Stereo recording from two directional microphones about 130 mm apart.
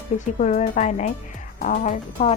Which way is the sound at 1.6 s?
90° left.